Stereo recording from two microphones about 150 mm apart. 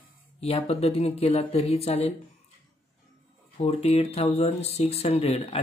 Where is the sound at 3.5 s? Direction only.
40° left (ahead or behind).